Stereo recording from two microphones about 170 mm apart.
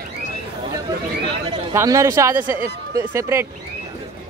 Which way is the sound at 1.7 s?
15° right (ahead or behind).